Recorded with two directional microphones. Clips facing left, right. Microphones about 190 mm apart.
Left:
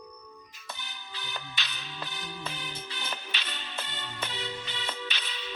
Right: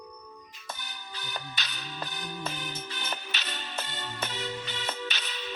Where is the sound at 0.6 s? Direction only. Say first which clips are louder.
Right 2 dB; 45° right (ahead or behind).